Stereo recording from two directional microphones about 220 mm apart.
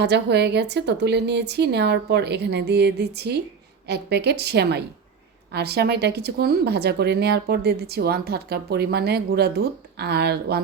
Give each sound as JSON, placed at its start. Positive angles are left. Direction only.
{"t": 0.0, "sound": "speech", "side_deg": -50}